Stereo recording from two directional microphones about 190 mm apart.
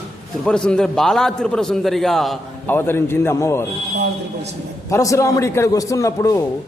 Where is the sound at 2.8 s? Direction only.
10° left (ahead or behind).